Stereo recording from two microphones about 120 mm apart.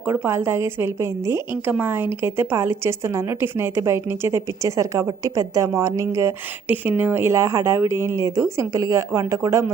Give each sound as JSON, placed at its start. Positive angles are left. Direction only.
{"t": 0.0, "sound": "a woman's voice", "side_deg": -20}